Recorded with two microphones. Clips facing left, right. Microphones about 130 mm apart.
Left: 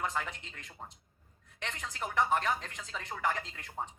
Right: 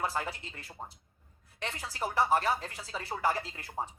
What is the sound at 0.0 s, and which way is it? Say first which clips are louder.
Speech: right 2 dB; 35° right (ahead or behind).